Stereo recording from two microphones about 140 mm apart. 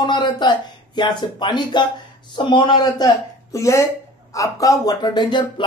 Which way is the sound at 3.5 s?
20° left (ahead or behind).